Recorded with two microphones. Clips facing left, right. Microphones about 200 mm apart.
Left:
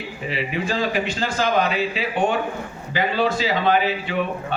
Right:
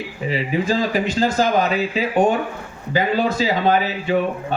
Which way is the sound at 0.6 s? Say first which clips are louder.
Right 2 dB; 40° right (ahead or behind).